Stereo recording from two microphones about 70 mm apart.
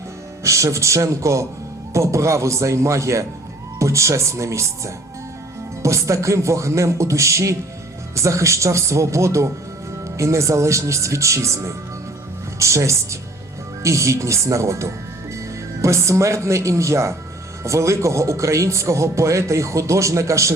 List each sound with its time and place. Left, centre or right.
0.4 s a man's voice: right